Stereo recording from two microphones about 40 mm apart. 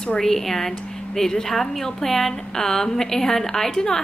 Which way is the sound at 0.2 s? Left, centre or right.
Centre.